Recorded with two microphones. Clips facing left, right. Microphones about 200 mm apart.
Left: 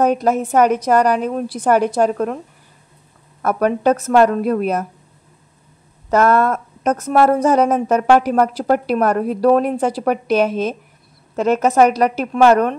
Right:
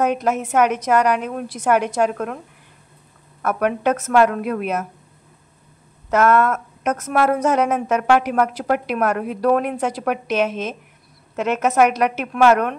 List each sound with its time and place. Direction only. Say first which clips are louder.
0.0 s speech: left 4 dB; 35° left (ahead or behind)
3.4 s speech: left 4 dB; 35° left (ahead or behind)
6.0 s speech: left 2 dB; 35° left (ahead or behind)